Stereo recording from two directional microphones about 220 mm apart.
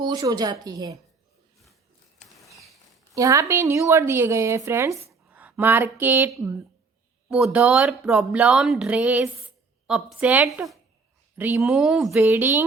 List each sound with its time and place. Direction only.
0.0 s speech: 20° right (ahead or behind)
2.1 s a sound: centre (ahead or behind)
3.2 s speech: 15° right (ahead or behind)